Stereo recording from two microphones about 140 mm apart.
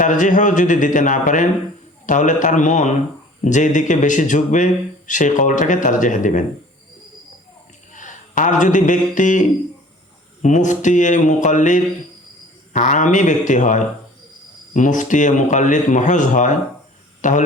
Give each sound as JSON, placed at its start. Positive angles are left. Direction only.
{"t": 0.0, "sound": "speech", "side_deg": 65}
{"t": 7.9, "sound": "a man's voice", "side_deg": 65}